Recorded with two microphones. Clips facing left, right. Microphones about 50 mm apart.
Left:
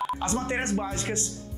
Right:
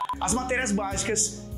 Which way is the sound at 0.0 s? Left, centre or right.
Centre.